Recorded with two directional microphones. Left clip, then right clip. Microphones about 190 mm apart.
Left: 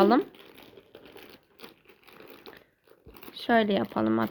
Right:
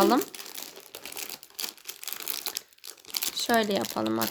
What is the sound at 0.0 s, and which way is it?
Crumpling, 10° right (ahead or behind).